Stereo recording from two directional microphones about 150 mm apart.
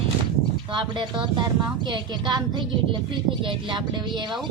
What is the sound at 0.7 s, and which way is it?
A woman's voice, 35° right (ahead or behind).